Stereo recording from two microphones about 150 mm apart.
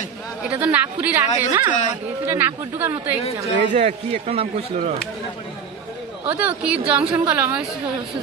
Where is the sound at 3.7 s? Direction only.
50° right (ahead or behind).